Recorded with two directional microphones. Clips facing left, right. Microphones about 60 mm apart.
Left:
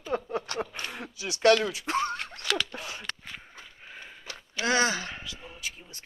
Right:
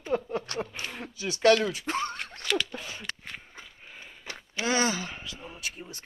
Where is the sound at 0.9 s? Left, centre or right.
Centre.